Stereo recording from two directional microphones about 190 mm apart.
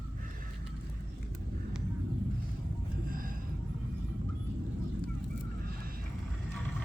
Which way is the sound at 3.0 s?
50° right (ahead or behind).